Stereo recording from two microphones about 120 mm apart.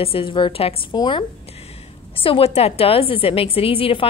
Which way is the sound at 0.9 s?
40° left (ahead or behind).